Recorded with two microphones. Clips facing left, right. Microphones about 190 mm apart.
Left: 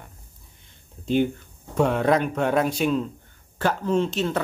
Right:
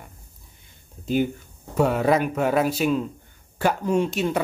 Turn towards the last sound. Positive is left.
turn(degrees=-10)  # may be behind; listen again after turning